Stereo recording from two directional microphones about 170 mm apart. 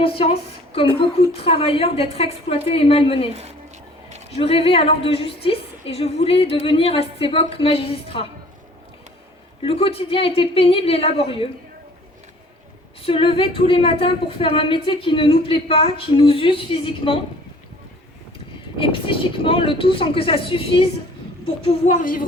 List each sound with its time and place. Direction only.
0.0 s a woman's voice: 35° left (ahead or behind)
4.4 s a woman's voice: 35° left (ahead or behind)
9.6 s a woman's voice: 35° left (ahead or behind)
13.0 s a woman's voice: 35° left (ahead or behind)
18.8 s a woman's voice: 30° left (ahead or behind); by 22.2 s 50° left (ahead or behind)